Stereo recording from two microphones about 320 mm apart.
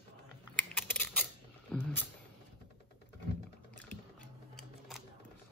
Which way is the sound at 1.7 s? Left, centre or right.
Centre.